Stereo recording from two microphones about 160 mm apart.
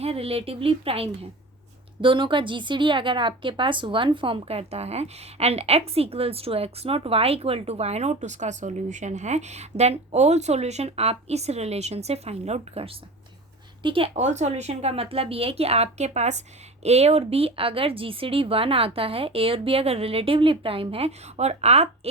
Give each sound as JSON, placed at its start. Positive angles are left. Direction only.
{"t": 0.0, "sound": "a woman's voice", "side_deg": -35}